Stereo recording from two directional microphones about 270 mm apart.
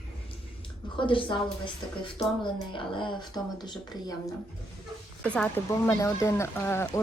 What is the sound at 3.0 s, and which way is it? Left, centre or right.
Speech, centre.